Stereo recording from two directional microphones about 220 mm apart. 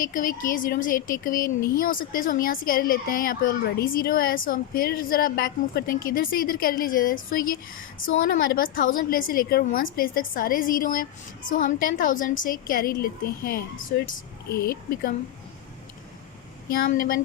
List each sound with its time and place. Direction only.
0.0 s speech: 40° left (ahead or behind)
16.7 s speech: 40° left (ahead or behind)